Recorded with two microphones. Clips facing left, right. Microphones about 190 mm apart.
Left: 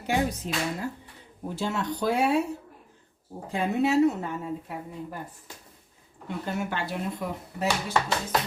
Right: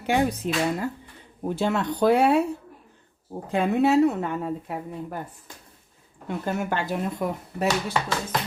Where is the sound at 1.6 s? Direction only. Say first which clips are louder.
Right 5 dB; 60° right (ahead or behind).